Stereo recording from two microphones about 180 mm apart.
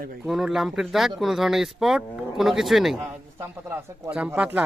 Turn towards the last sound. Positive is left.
turn(degrees=-10)  # may be behind; listen again after turning